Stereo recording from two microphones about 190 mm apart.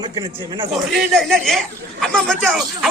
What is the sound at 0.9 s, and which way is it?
Speech, centre (ahead or behind).